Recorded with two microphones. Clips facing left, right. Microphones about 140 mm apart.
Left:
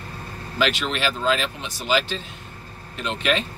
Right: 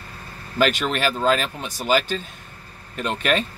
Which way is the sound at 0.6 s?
45° right (ahead or behind).